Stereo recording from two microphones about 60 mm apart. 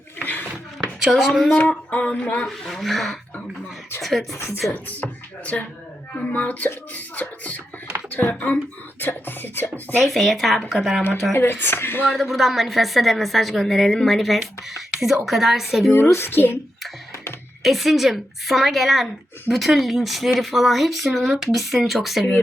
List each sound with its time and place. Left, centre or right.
0.2 s a sound: left
1.1 s speech: centre
1.5 s beatboxing: centre
2.5 s speech: centre
4.3 s speech: left
4.7 s speech: left
6.1 s beatboxing: left
9.0 s music: left
10.0 s speech: centre
11.3 s music: left
12.0 s speech: centre
16.0 s music: left
17.6 s speech: centre